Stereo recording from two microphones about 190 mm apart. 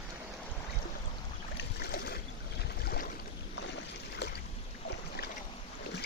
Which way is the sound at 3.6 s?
65° left (ahead or behind).